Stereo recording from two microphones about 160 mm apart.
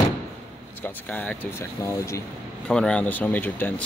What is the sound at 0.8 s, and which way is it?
Speech, 10° left (ahead or behind).